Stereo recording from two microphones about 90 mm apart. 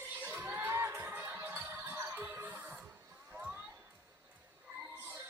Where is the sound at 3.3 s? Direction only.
10° right (ahead or behind).